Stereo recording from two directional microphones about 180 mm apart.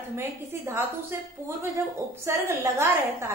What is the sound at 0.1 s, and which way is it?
Speech, 15° right (ahead or behind).